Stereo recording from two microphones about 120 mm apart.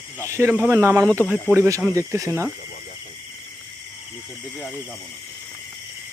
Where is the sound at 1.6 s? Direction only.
25° right (ahead or behind).